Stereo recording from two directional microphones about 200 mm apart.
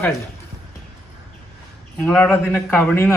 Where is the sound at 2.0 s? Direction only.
10° left (ahead or behind).